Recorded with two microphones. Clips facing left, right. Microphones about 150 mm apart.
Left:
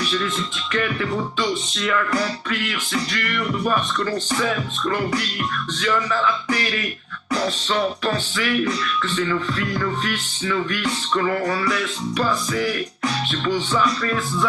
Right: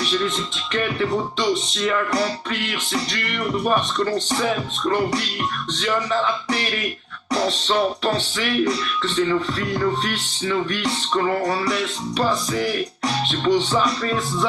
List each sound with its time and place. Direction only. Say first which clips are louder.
0.0 s music: right 1 dB; 30° right (ahead or behind)